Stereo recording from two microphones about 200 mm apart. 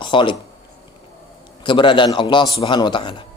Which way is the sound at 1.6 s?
25° left (ahead or behind).